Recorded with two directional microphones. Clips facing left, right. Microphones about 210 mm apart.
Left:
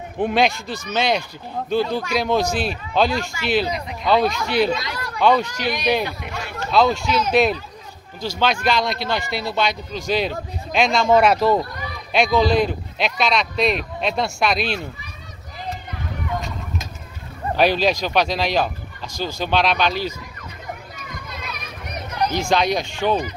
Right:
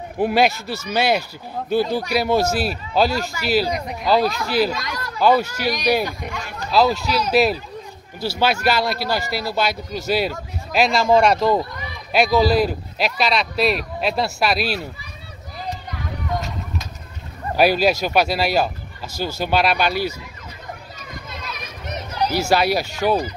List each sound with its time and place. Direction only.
0.2 s speech: 5° right (ahead or behind)
5.7 s speech: 40° right (ahead or behind)
6.7 s speech: 5° right (ahead or behind)
17.6 s speech: 10° right (ahead or behind)
22.2 s speech: 10° right (ahead or behind)